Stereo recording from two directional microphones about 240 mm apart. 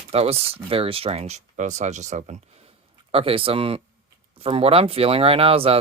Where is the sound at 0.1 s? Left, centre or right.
Right.